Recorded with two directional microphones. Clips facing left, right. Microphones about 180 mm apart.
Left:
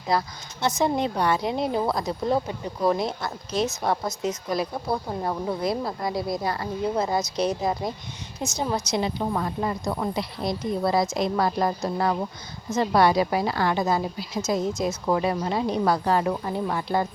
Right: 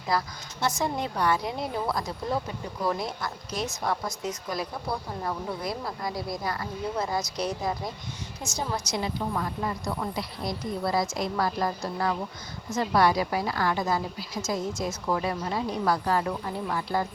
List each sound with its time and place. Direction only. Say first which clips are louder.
0.1 s a woman's voice: left 3 dB; 25° left (ahead or behind)